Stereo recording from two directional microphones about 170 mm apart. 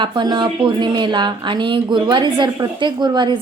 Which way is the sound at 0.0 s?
25° right (ahead or behind).